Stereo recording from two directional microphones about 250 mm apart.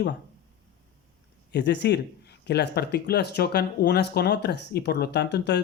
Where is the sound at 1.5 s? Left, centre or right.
Left.